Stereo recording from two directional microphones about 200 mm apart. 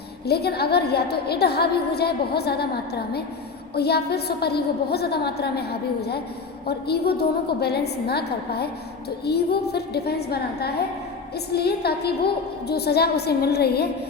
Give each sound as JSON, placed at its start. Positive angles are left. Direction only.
{"t": 0.3, "sound": "a woman's voice", "side_deg": 55}